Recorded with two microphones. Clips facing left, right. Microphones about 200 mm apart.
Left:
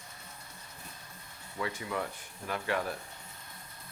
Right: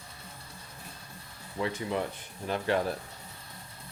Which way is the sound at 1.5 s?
25° right (ahead or behind).